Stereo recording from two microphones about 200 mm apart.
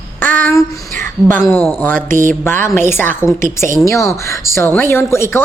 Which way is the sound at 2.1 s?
40° right (ahead or behind).